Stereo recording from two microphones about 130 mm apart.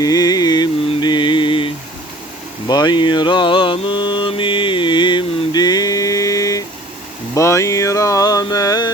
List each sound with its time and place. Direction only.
0.0 s carnatic music: 30° left (ahead or behind)
1.0 s mantra: 35° left (ahead or behind)
7.3 s a sound: 25° left (ahead or behind)